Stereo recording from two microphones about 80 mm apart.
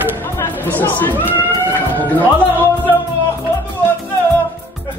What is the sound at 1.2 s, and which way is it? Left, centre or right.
Run, right.